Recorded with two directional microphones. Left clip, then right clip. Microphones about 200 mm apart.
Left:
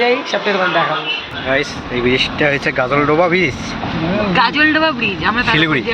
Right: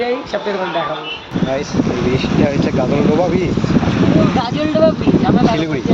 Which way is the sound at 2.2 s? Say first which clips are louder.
Left 1 dB; 10° right (ahead or behind).